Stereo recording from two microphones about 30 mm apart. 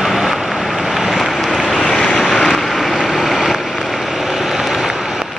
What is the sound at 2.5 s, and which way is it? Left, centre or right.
Vehicle, centre.